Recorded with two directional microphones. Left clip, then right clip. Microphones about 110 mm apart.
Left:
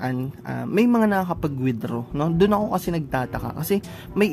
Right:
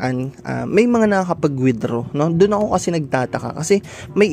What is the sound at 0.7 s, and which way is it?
Speech, 30° right (ahead or behind).